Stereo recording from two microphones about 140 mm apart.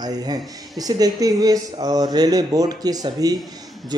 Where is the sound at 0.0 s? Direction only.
30° right (ahead or behind).